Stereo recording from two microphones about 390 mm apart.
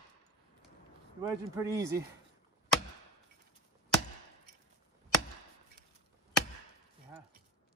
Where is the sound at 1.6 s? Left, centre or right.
Centre.